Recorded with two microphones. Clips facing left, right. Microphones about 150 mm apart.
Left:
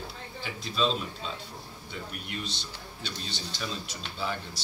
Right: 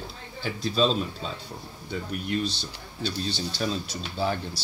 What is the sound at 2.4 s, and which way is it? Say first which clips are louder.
Speech: right 7 dB; 35° right (ahead or behind).